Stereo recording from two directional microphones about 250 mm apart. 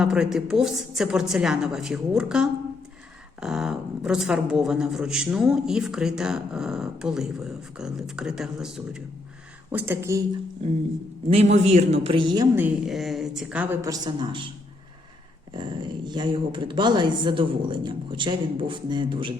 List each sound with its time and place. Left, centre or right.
0.0 s a woman's voice: centre
11.3 s a woman's voice: right
15.5 s speech: centre